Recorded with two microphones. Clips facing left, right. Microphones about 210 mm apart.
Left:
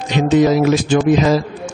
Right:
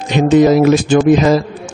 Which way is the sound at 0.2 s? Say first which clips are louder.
Right 4 dB; 50° right (ahead or behind).